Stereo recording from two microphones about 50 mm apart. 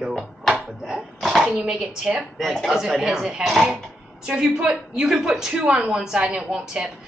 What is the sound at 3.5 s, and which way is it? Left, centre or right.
Speech, centre.